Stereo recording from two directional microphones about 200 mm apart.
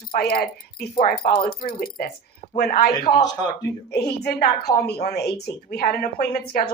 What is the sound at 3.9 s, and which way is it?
A woman's voice, 50° left (ahead or behind).